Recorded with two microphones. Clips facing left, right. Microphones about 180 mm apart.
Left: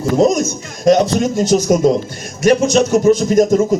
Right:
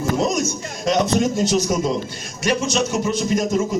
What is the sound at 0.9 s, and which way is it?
Speech, 45° left (ahead or behind).